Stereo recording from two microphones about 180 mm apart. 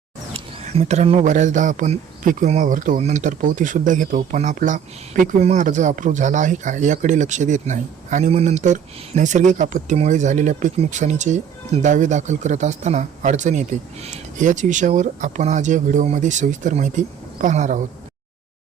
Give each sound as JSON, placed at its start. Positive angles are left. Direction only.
{"t": 0.3, "sound": "speech", "side_deg": -35}